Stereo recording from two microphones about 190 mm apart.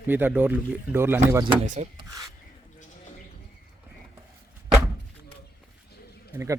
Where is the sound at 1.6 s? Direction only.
40° right (ahead or behind).